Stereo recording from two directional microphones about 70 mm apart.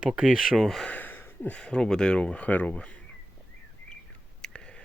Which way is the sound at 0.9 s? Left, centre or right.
Left.